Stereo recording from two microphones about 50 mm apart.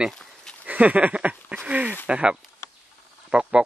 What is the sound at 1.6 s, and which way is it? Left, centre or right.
A man's voice, right.